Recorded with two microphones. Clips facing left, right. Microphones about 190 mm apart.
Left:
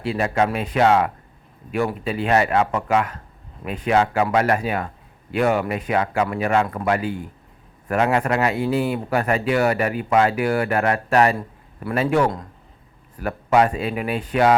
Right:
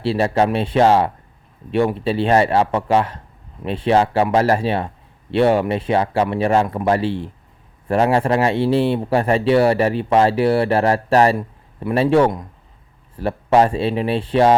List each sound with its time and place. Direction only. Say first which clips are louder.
0.0 s speech: right 4 dB; 30° right (ahead or behind)